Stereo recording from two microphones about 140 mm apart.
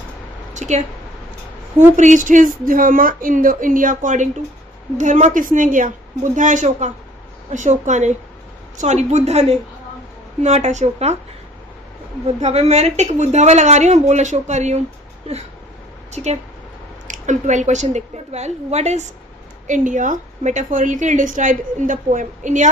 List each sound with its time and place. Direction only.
0.5 s a sound: 60° right (ahead or behind)
2.0 s a woman's voice: 65° right (ahead or behind)
12.4 s a woman's voice: 50° right (ahead or behind)
19.6 s a woman's voice: 65° right (ahead or behind)